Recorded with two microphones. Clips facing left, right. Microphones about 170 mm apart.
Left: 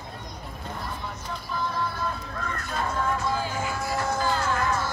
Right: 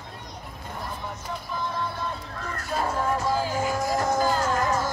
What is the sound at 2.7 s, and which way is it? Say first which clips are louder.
Music: right 3 dB; 35° right (ahead or behind).